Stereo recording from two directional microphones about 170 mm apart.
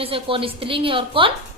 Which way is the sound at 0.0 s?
35° right (ahead or behind).